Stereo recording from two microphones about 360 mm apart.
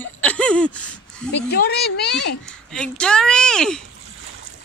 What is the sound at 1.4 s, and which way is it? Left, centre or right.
Speech, left.